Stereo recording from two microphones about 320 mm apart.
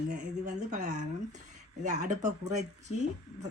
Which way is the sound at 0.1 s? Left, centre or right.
Right.